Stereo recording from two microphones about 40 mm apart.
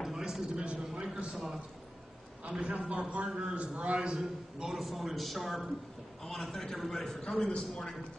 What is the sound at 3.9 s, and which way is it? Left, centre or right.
Speech, centre.